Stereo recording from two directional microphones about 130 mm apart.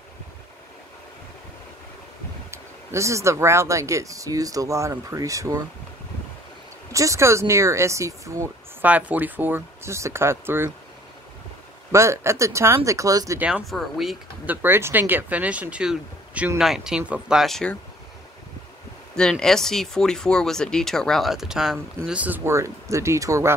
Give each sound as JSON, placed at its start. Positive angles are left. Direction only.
{"t": 2.5, "sound": "speech", "side_deg": -20}
{"t": 6.9, "sound": "speech", "side_deg": -25}
{"t": 8.8, "sound": "speech", "side_deg": -10}
{"t": 11.9, "sound": "speech", "side_deg": -20}
{"t": 13.4, "sound": "speech", "side_deg": -10}
{"t": 14.4, "sound": "speech", "side_deg": -15}
{"t": 19.3, "sound": "speech", "side_deg": 5}